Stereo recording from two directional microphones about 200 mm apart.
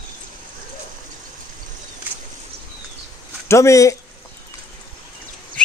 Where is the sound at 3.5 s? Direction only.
15° left (ahead or behind).